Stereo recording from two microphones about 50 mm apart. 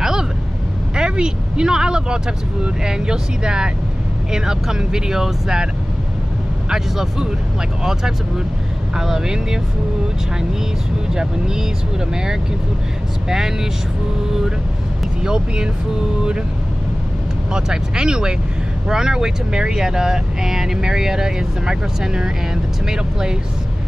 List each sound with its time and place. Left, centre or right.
0.0 s vehicle: centre
0.9 s speech: centre
6.7 s speech: centre
11.1 s speech: centre
15.2 s speech: centre
17.5 s speech: centre